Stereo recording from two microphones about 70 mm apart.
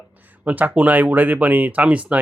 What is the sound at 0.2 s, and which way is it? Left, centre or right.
A man's voice, right.